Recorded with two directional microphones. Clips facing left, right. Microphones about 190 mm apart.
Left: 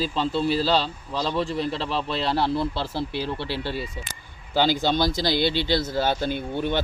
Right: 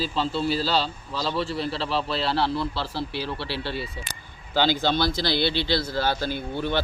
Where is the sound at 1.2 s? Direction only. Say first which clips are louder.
Left 1 dB; 20° left (ahead or behind).